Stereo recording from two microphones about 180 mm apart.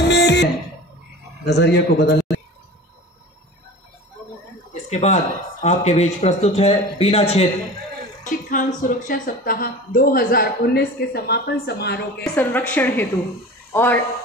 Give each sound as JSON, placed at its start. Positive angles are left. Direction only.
{"t": 0.1, "sound": "a sound", "side_deg": 70}
{"t": 1.4, "sound": "a man's voice", "side_deg": 70}
{"t": 4.8, "sound": "speech", "side_deg": 35}
{"t": 8.2, "sound": "speech", "side_deg": 45}
{"t": 12.2, "sound": "speech", "side_deg": 10}